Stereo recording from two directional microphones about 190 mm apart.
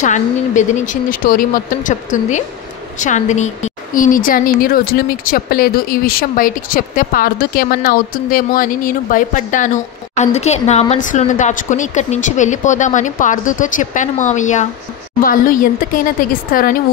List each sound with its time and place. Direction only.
0.0 s a woman's voice: 40° left (ahead or behind)